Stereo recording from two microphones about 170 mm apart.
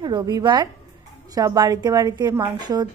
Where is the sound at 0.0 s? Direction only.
25° right (ahead or behind).